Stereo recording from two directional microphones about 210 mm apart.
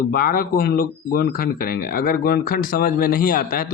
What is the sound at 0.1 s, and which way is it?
Speech, 45° left (ahead or behind).